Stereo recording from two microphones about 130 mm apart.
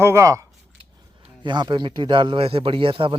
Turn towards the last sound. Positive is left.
turn(degrees=-40)  # may be behind; listen again after turning